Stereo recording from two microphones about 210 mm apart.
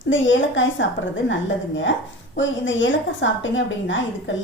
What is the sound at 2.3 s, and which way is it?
A woman's voice, 60° left (ahead or behind).